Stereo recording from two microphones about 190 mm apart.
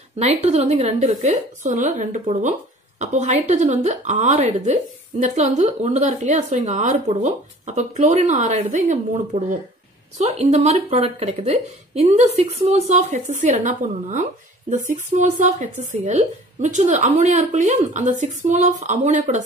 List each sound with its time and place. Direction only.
0.2 s speech: 35° right (ahead or behind)